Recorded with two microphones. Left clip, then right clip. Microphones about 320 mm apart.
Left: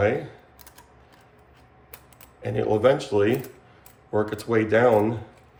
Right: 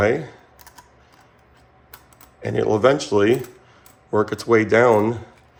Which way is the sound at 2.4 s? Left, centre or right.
Right.